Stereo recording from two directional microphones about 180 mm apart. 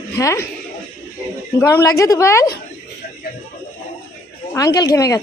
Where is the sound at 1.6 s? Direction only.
15° left (ahead or behind).